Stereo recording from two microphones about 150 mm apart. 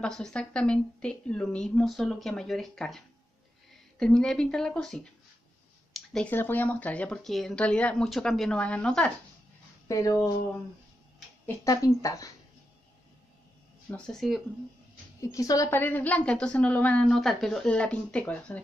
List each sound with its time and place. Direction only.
0.0 s a woman's voice: 5° left (ahead or behind)
4.0 s a woman's voice: 5° left (ahead or behind)
9.8 s speech: 20° left (ahead or behind)
11.4 s speech: 20° left (ahead or behind)
13.8 s speech: 5° left (ahead or behind)
15.3 s a woman's voice: 20° left (ahead or behind)